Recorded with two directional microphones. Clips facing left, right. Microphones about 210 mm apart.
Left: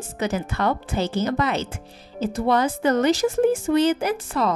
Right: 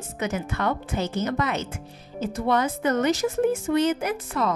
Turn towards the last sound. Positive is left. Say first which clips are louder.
# left 3 dB
turn(degrees=35)  # may be behind; listen again after turning